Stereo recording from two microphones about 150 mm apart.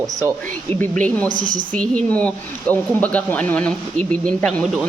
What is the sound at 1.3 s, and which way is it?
Speech, 60° right (ahead or behind).